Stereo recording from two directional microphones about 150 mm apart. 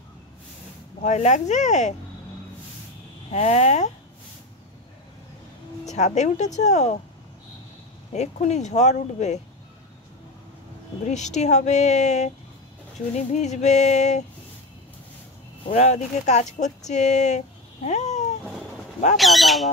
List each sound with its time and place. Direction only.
1.0 s speech: 50° left (ahead or behind)
3.3 s speech: 50° left (ahead or behind)
5.9 s speech: 50° left (ahead or behind)
8.1 s speech: 50° left (ahead or behind)
11.1 s speech: 50° left (ahead or behind)
15.6 s speech: 45° left (ahead or behind)
17.8 s cat: 50° left (ahead or behind)
19.1 s speech: centre (ahead or behind)